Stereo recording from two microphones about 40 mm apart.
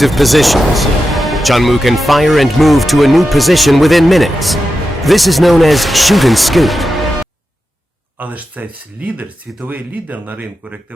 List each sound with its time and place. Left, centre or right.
0.0 s speech: centre
8.2 s speech: right
8.6 s speech: right
9.6 s speech: right